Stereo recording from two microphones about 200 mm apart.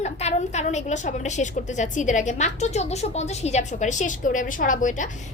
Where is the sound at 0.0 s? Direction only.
35° left (ahead or behind).